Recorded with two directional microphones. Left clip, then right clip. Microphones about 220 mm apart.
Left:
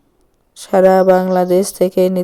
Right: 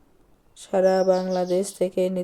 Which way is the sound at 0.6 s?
40° left (ahead or behind).